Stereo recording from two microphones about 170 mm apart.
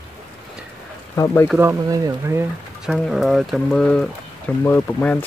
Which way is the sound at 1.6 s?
20° right (ahead or behind).